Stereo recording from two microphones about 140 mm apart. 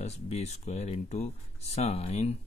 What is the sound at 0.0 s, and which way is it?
Speech, 50° left (ahead or behind).